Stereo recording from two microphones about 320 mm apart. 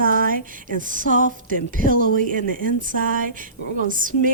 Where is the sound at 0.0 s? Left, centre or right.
Right.